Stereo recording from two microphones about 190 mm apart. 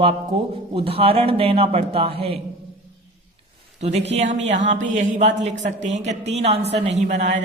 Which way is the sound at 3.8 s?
35° right (ahead or behind).